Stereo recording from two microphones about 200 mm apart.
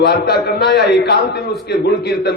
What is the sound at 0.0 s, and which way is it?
A man's voice, 55° left (ahead or behind).